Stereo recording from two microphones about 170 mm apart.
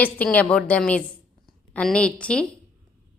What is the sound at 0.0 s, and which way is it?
A woman's voice, 10° left (ahead or behind).